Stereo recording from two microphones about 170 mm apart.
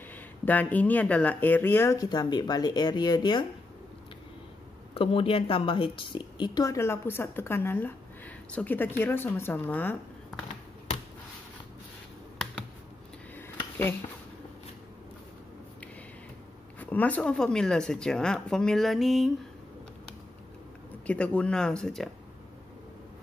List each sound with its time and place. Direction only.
0.1 s speech: 10° left (ahead or behind); by 3.4 s 25° left (ahead or behind)
4.9 s a woman's voice: 35° left (ahead or behind); by 10.4 s 10° left (ahead or behind)
16.8 s speech: 10° left (ahead or behind)
21.1 s speech: 10° left (ahead or behind)